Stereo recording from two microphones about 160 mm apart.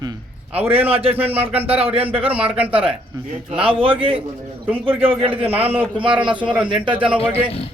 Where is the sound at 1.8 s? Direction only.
35° right (ahead or behind).